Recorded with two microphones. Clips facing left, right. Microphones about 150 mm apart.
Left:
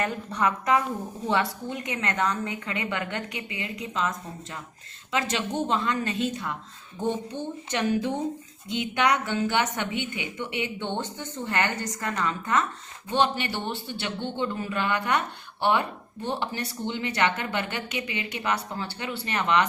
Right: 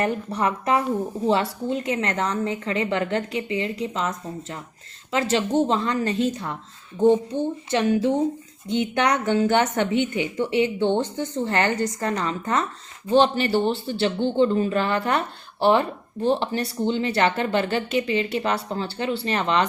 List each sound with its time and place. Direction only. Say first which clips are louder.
0.0 s a woman's voice: right 3 dB; 30° right (ahead or behind)
7.3 s speech: right 8 dB; 15° right (ahead or behind)
7.7 s a woman's voice: right 4 dB; 25° right (ahead or behind)
9.0 s speech: right 4 dB; 35° right (ahead or behind)